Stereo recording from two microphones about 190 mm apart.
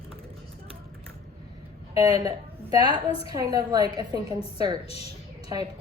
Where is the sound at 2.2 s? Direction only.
20° right (ahead or behind).